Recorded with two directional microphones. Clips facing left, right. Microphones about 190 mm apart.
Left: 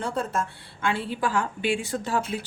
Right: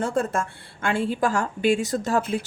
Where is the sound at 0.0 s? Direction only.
45° right (ahead or behind).